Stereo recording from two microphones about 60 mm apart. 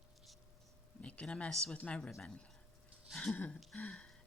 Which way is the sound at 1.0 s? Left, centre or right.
Left.